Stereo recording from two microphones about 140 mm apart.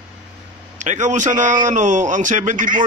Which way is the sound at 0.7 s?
60° right (ahead or behind).